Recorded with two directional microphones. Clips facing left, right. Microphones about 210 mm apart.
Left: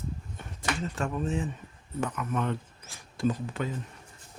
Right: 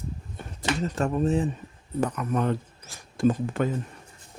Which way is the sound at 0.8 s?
40° right (ahead or behind).